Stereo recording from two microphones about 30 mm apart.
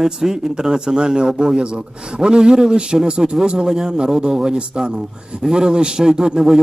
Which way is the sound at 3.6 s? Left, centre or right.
Centre.